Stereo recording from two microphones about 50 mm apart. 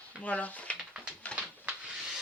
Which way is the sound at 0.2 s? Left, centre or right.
Left.